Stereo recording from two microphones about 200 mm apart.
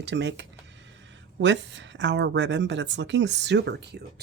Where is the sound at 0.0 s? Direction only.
60° right (ahead or behind).